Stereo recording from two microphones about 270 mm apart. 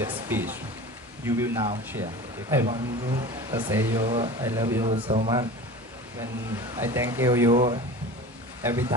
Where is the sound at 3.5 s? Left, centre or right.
Centre.